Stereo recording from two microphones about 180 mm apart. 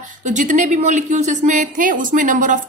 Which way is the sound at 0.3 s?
45° right (ahead or behind).